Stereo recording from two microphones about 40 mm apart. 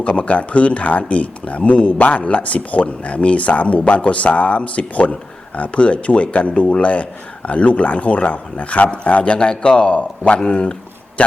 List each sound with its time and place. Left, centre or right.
0.0 s speech: left